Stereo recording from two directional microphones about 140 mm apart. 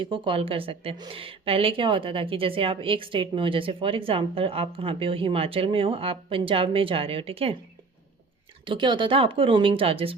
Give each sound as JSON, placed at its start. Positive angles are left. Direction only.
{"t": 0.0, "sound": "a woman's voice", "side_deg": -40}
{"t": 8.6, "sound": "a woman's voice", "side_deg": -35}